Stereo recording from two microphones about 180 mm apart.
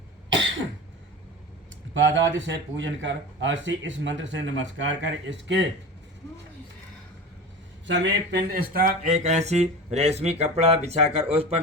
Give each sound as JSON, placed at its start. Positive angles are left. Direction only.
{"t": 1.9, "sound": "speech", "side_deg": -90}
{"t": 7.9, "sound": "speech", "side_deg": -90}